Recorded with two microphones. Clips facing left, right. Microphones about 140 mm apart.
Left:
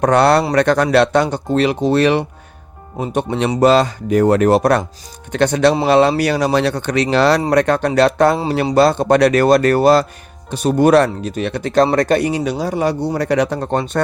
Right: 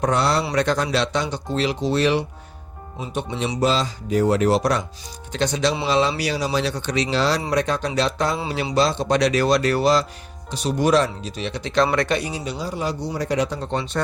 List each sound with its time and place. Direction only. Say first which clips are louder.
0.0 s speech: left 8 dB; 65° left (ahead or behind)
8.4 s speech: left 7 dB; 40° left (ahead or behind)